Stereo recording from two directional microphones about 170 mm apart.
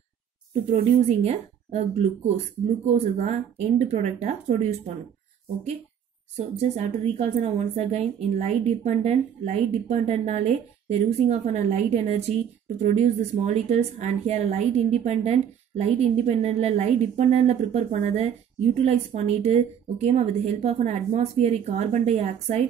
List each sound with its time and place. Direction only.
0.7 s a woman's voice: 40° right (ahead or behind)
6.3 s a woman's voice: 40° right (ahead or behind)